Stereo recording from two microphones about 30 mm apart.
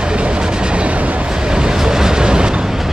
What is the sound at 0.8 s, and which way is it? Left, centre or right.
Train, right.